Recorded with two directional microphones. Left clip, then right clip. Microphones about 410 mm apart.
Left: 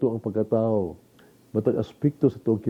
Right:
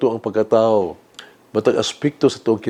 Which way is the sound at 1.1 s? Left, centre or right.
Centre.